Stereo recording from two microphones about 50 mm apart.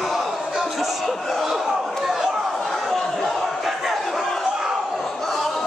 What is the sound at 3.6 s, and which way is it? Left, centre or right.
Crowd, centre.